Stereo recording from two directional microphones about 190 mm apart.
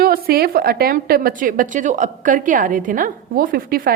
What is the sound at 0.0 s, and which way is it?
A woman's voice, 50° right (ahead or behind).